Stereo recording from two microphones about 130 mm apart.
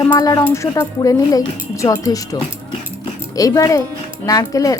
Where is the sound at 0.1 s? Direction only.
25° left (ahead or behind).